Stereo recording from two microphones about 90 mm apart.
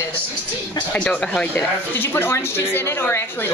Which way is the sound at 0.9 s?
15° left (ahead or behind).